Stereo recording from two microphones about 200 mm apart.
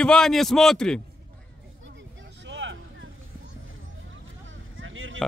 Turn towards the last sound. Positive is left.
turn(degrees=-75)  # may be behind; listen again after turning